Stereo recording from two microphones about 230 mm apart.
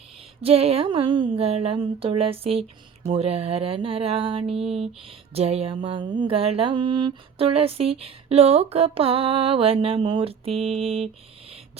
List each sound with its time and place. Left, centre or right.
0.4 s music: right